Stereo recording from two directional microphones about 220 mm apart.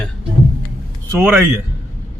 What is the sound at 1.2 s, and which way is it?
Speech, 10° right (ahead or behind).